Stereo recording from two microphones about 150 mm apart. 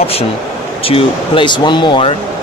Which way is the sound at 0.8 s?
35° left (ahead or behind).